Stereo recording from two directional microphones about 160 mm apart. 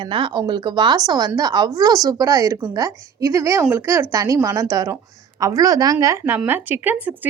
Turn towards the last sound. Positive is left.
turn(degrees=-10)  # may be behind; listen again after turning